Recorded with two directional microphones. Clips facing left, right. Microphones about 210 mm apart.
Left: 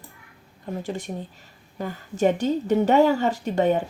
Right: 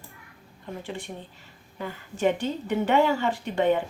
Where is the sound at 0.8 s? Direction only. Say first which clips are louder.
Left 5 dB; 40° left (ahead or behind).